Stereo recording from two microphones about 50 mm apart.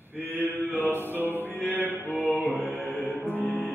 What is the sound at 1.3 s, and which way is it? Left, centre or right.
Music, left.